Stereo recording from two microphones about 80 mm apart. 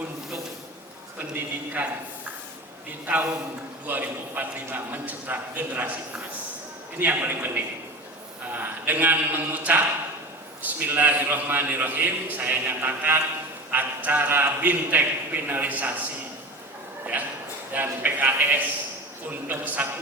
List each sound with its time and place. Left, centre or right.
1.4 s a man's voice: right
3.8 s a man's voice: right
7.0 s a man's voice: right
17.7 s a man's voice: right